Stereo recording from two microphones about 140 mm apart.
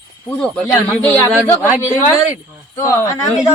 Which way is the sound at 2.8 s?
25° left (ahead or behind).